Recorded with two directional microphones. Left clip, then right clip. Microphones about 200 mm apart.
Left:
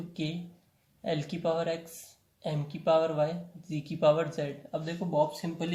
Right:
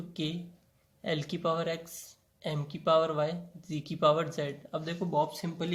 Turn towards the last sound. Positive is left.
turn(degrees=-35)  # may be behind; listen again after turning